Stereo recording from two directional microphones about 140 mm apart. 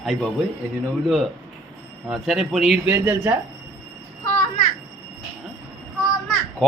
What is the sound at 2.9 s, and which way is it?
Speech, 15° right (ahead or behind).